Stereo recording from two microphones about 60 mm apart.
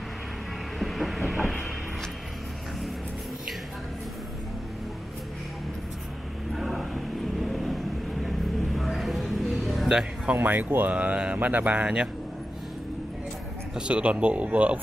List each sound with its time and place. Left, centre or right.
0.7 s train: centre
6.5 s vehicle: centre
9.8 s a sound: centre
10.3 s speech: right
10.9 s speech: right
13.7 s speech: centre